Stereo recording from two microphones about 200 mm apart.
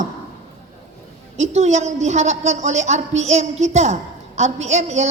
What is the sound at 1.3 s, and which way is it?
A woman's voice, 35° right (ahead or behind).